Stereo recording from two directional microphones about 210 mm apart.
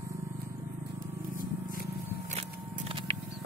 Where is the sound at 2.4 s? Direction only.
25° right (ahead or behind).